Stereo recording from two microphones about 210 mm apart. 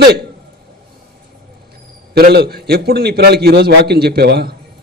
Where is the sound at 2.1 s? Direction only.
50° right (ahead or behind).